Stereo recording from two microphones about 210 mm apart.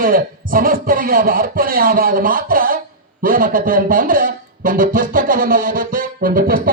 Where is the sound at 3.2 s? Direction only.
40° right (ahead or behind).